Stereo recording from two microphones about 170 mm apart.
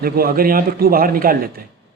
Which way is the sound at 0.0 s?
60° right (ahead or behind).